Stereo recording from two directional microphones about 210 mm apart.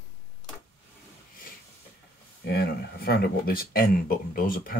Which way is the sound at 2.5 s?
45° left (ahead or behind).